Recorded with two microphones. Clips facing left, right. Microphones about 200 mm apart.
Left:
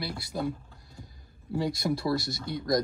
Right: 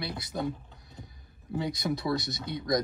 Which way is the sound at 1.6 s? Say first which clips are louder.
Left 2 dB; 20° right (ahead or behind).